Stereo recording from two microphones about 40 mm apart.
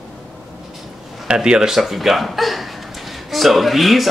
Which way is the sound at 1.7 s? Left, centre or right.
Centre.